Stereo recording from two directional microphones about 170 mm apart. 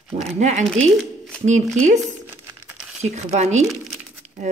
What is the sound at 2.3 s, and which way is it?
Crumpling, 10° right (ahead or behind).